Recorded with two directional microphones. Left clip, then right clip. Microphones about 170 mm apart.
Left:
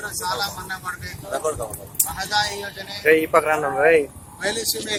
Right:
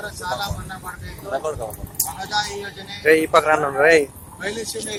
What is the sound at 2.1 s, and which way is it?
Speech, 10° right (ahead or behind).